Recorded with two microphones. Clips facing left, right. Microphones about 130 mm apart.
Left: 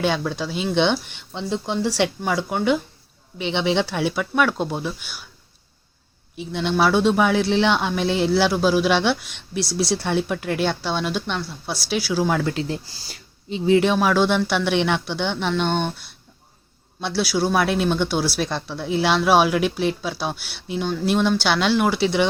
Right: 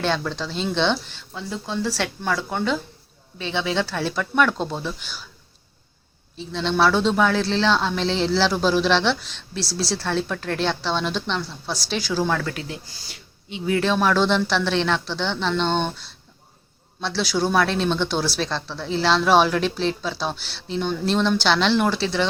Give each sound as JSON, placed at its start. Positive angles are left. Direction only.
{"t": 0.0, "sound": "speech", "side_deg": 10}
{"t": 6.3, "sound": "speech", "side_deg": 15}
{"t": 12.6, "sound": "speech", "side_deg": 35}
{"t": 13.7, "sound": "speech", "side_deg": 15}
{"t": 17.0, "sound": "speech", "side_deg": 10}